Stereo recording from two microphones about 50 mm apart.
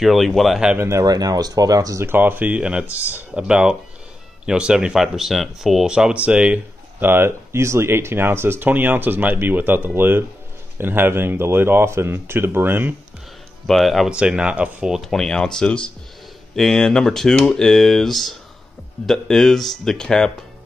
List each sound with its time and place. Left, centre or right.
0.0 s speech: centre
0.7 s speech: right
2.1 s speech: right
2.6 s speech: right
2.9 s speech: right
3.3 s speech: centre
4.9 s speech: centre
5.9 s speech: centre
7.0 s speech: right
7.6 s speech: right
13.7 s speech: centre
14.1 s speech: centre
14.5 s speech: right
15.0 s speech: centre